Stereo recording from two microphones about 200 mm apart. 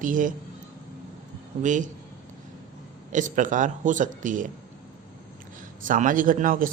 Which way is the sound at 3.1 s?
40° right (ahead or behind).